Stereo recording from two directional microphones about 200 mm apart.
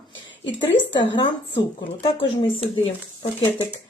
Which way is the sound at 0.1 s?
65° left (ahead or behind).